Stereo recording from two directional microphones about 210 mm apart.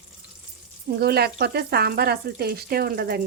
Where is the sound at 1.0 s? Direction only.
50° right (ahead or behind).